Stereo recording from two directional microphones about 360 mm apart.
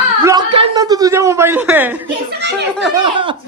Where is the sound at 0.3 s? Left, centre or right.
Centre.